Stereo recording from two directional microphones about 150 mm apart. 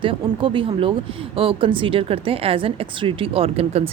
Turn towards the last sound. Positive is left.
turn(degrees=-40)  # may be behind; listen again after turning